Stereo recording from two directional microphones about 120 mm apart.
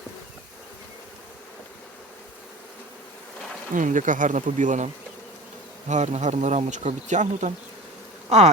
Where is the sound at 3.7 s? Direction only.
90° right.